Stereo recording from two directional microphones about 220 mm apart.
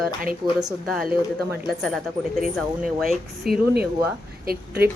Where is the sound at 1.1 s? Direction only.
5° right (ahead or behind).